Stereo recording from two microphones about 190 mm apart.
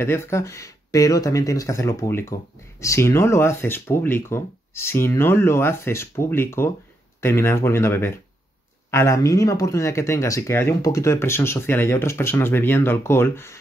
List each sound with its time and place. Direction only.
0.0 s speech: 15° left (ahead or behind)